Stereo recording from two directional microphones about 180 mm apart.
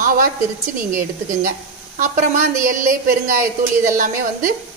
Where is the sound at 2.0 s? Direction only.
45° right (ahead or behind).